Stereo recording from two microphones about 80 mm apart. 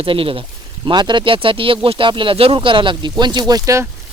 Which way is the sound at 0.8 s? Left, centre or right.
Right.